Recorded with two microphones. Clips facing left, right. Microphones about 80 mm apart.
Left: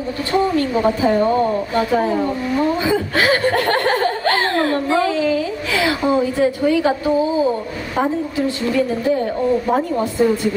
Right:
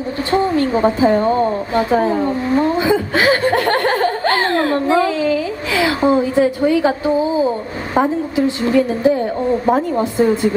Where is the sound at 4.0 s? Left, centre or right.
Right.